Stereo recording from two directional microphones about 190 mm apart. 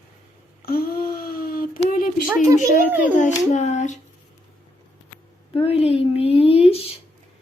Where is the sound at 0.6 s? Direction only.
50° left (ahead or behind).